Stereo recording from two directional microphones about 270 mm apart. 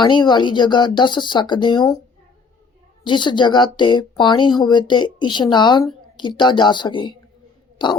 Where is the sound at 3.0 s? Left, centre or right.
Centre.